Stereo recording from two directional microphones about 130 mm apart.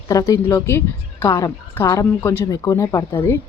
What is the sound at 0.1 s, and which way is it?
Speech, 25° left (ahead or behind).